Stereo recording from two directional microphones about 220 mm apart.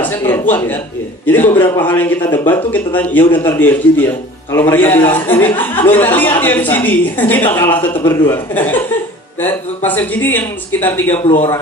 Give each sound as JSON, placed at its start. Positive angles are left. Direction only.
{"t": 0.0, "sound": "a woman's voice", "side_deg": 10}
{"t": 11.2, "sound": "a man's voice", "side_deg": 30}